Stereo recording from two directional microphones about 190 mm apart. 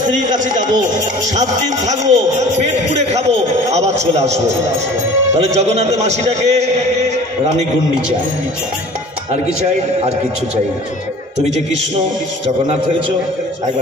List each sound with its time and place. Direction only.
0.2 s speech: 40° right (ahead or behind)